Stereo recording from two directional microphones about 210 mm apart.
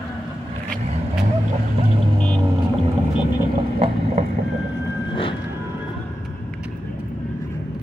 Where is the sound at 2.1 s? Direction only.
5° left (ahead or behind).